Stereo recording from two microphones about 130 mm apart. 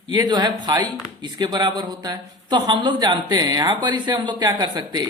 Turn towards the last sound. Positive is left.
turn(degrees=-30)  # may be behind; listen again after turning